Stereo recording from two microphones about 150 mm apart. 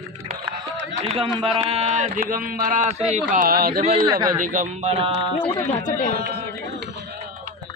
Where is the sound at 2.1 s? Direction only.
70° right (ahead or behind); by 3.8 s 90° right.